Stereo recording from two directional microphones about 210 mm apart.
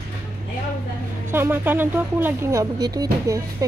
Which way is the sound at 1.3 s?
10° right (ahead or behind).